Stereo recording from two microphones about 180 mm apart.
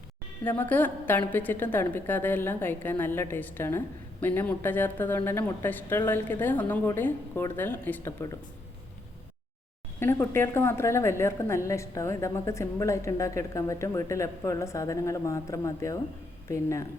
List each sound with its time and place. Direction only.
0.4 s a woman's voice: 10° left (ahead or behind)
10.0 s a woman's voice: 10° left (ahead or behind)